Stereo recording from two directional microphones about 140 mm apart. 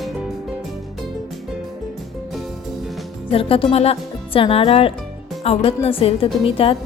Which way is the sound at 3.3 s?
40° left (ahead or behind).